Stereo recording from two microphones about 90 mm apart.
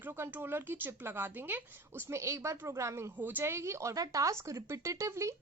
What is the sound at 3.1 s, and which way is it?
Speech, 20° right (ahead or behind).